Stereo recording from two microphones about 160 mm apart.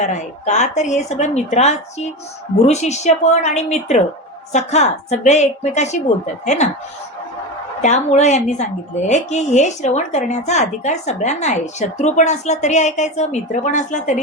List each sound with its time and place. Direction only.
0.0 s a woman's voice: 50° left (ahead or behind)
7.8 s a woman's voice: 45° left (ahead or behind)